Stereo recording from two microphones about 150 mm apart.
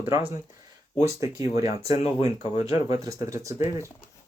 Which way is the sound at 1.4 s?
25° right (ahead or behind).